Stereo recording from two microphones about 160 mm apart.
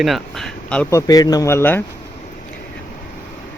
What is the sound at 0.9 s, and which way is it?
Speech, 20° left (ahead or behind).